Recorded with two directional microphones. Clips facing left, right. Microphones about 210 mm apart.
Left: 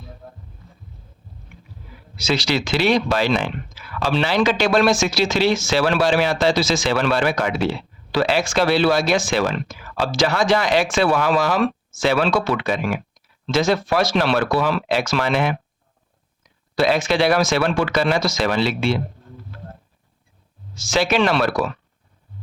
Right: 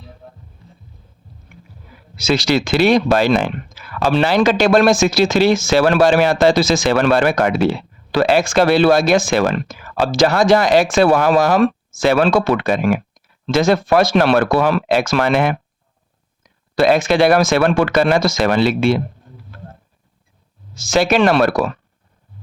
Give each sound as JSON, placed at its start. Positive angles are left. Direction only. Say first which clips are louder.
{"t": 2.1, "sound": "speech", "louder": "right 5 dB", "side_deg": -45}
{"t": 20.7, "sound": "speech", "louder": "right 4 dB", "side_deg": -45}